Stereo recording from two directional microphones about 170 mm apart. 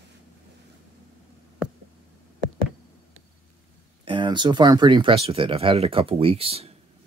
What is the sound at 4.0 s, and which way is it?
Speech, 30° right (ahead or behind).